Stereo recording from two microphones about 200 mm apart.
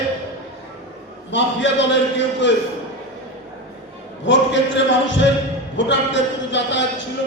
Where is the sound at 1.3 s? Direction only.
65° left (ahead or behind).